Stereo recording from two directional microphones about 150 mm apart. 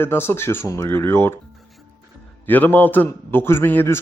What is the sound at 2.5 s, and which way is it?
A man's voice, 10° left (ahead or behind).